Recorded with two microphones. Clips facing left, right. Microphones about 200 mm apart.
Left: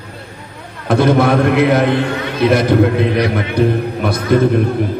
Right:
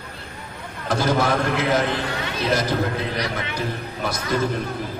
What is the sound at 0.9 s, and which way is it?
A man's voice, 60° left (ahead or behind).